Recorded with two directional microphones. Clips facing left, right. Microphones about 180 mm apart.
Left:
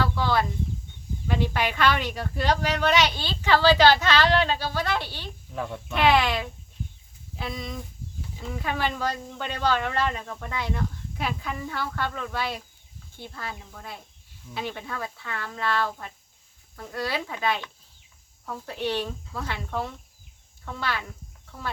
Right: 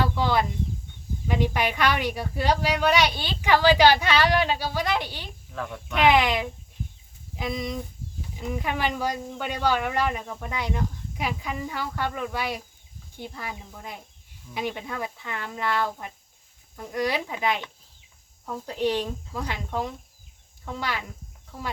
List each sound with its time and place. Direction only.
0.0 s a sound: 15° right (ahead or behind)
1.3 s speech: 15° right (ahead or behind)
5.5 s speech: 15° left (ahead or behind)
5.9 s speech: 15° right (ahead or behind)